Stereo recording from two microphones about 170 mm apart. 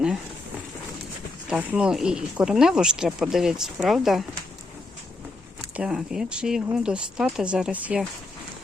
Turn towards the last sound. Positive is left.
turn(degrees=-5)  # may be behind; listen again after turning